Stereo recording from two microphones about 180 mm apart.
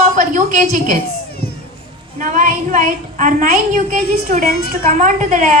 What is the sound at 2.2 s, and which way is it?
A woman's voice, 45° right (ahead or behind).